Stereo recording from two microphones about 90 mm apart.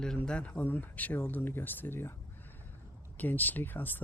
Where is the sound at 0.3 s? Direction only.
15° left (ahead or behind).